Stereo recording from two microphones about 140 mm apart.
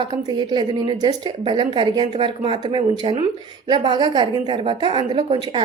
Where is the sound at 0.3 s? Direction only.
35° right (ahead or behind).